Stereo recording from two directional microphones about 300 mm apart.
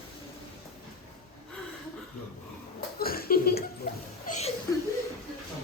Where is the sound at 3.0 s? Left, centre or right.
Left.